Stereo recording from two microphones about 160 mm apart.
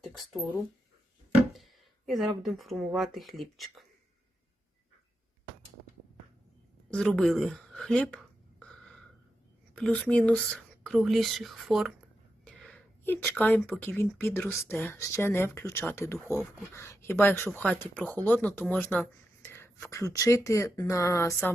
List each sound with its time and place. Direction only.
1.5 s speech: centre (ahead or behind)
6.9 s speech: 5° left (ahead or behind)
9.7 s speech: 5° left (ahead or behind)